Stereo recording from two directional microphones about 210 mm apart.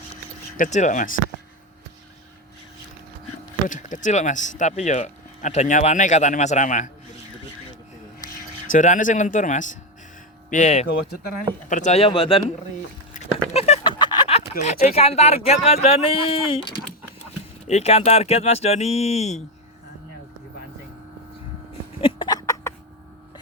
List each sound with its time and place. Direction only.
0.5 s speech: 35° left (ahead or behind)
3.7 s speech: 35° left (ahead or behind)
8.7 s speech: 35° left (ahead or behind)
13.2 s a sound: 35° left (ahead or behind)
14.6 s speech: 30° left (ahead or behind)
22.0 s a sound: 20° left (ahead or behind)